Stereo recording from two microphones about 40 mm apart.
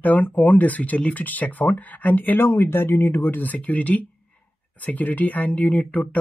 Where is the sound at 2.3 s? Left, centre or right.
Left.